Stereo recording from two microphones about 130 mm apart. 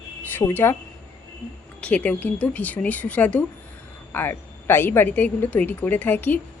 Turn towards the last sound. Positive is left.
turn(degrees=15)  # may be behind; listen again after turning